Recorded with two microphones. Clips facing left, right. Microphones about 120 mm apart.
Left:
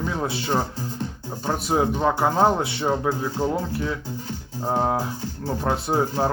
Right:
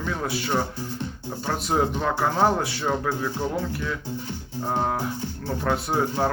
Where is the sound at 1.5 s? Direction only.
10° left (ahead or behind); by 3.9 s 25° left (ahead or behind).